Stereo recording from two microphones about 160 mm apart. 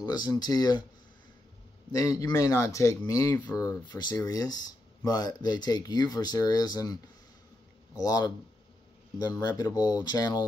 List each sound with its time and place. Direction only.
0.0 s speech: 25° left (ahead or behind)
1.9 s speech: 20° left (ahead or behind)